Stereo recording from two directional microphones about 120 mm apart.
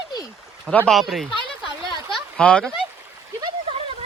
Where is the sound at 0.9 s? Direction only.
Centre (ahead or behind).